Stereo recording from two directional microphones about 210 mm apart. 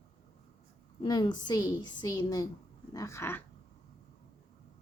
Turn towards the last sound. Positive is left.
turn(degrees=10)  # may be behind; listen again after turning